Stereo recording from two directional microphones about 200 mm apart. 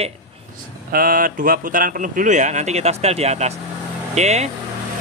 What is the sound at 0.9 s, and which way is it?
Speech, 45° right (ahead or behind).